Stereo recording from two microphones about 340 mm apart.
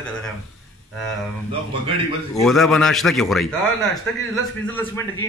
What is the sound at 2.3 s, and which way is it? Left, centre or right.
A man's voice, centre.